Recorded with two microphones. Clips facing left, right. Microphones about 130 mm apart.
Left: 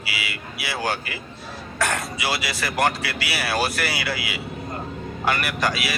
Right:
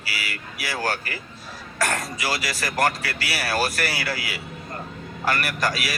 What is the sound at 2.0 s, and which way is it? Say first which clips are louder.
Speech: left 1 dB; 40° right (ahead or behind).